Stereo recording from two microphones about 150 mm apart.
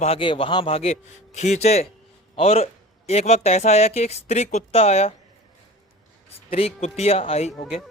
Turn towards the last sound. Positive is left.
turn(degrees=40)  # may be behind; listen again after turning